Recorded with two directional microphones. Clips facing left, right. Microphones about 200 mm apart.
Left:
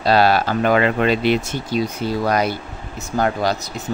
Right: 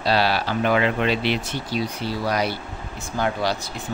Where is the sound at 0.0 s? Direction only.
50° left (ahead or behind).